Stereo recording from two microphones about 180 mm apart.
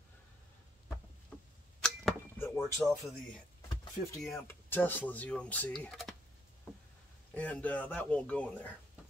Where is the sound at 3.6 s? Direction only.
20° left (ahead or behind).